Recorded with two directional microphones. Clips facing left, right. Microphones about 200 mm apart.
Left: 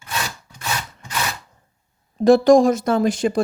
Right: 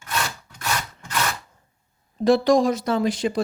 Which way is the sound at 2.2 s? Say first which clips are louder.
Left 5 dB; 45° left (ahead or behind).